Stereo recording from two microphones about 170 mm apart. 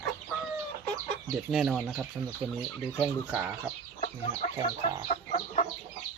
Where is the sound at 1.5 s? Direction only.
Centre (ahead or behind).